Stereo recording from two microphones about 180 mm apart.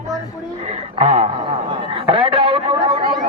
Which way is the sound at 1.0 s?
35° right (ahead or behind).